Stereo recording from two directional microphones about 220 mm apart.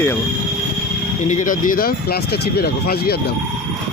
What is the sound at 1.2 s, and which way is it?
Speech, 35° left (ahead or behind).